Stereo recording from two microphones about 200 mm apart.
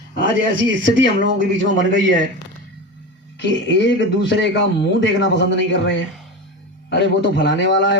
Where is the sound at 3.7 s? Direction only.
65° left (ahead or behind).